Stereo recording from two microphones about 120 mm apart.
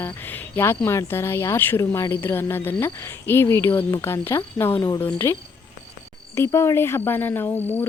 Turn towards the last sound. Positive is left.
turn(degrees=15)  # may be behind; listen again after turning